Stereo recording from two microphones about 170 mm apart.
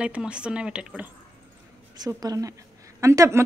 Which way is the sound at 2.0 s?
20° right (ahead or behind).